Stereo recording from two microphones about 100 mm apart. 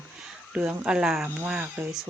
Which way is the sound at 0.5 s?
5° right (ahead or behind).